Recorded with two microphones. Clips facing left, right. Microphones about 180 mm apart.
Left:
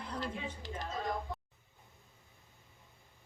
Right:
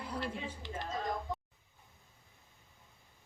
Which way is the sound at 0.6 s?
40° left (ahead or behind).